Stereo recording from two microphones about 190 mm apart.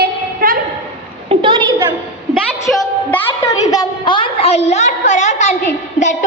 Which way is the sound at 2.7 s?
5° left (ahead or behind).